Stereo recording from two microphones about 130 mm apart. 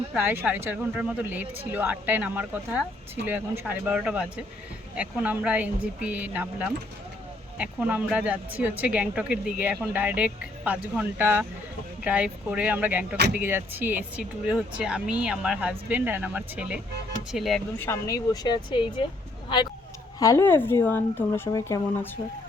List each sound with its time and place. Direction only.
0.1 s speech: 15° right (ahead or behind)
17.7 s speech: 20° left (ahead or behind); by 18.9 s 35° left (ahead or behind)
20.1 s a woman's voice: 25° left (ahead or behind)
20.4 s speech: 15° left (ahead or behind)